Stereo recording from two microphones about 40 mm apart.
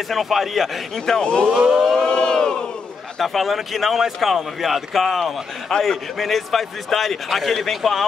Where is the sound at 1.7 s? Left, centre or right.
Centre.